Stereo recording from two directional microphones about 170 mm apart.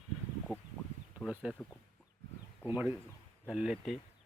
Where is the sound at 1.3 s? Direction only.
5° right (ahead or behind).